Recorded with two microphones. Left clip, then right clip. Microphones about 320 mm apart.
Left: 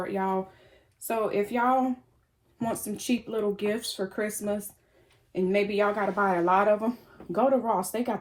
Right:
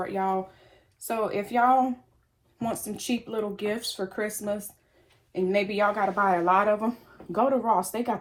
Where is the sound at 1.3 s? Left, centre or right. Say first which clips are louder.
Right 4 dB; centre.